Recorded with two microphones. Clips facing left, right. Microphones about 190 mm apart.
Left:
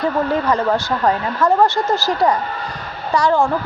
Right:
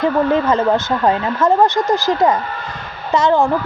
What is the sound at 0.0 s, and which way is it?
A woman's voice, 20° right (ahead or behind).